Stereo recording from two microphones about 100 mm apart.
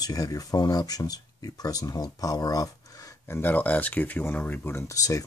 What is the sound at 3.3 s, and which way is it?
Speech, 20° left (ahead or behind).